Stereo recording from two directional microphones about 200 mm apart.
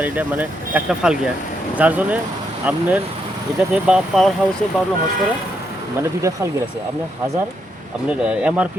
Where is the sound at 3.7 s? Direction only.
Centre (ahead or behind).